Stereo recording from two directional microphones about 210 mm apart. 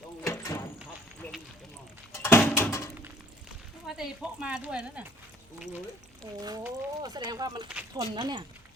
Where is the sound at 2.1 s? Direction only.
10° left (ahead or behind).